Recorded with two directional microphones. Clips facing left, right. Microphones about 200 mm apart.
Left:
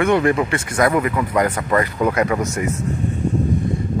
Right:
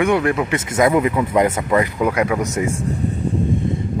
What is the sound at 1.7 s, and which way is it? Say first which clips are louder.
Speech: right 1 dB; 10° right (ahead or behind).